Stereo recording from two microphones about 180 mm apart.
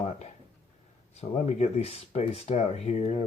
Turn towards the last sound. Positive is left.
turn(degrees=35)  # may be behind; listen again after turning